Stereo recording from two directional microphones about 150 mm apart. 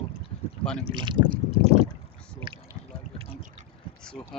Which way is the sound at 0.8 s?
30° right (ahead or behind).